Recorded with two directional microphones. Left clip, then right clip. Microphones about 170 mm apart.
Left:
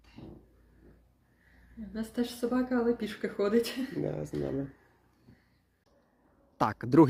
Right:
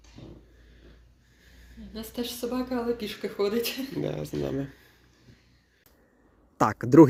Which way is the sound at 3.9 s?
Centre (ahead or behind).